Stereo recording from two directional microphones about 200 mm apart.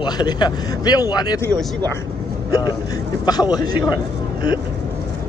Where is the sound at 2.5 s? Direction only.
20° left (ahead or behind).